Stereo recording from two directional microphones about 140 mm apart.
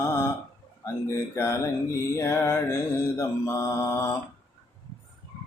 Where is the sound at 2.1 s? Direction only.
20° left (ahead or behind).